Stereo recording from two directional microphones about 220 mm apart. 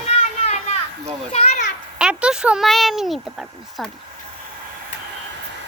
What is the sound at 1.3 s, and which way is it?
Children playing, 30° left (ahead or behind).